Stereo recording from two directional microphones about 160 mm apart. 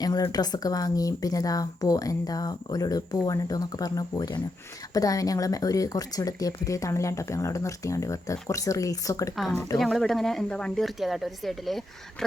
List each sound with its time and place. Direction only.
0.0 s speech: 25° left (ahead or behind)
9.3 s speech: centre (ahead or behind)